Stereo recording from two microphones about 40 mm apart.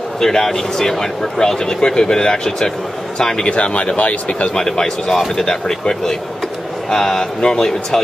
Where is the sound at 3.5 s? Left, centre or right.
Left.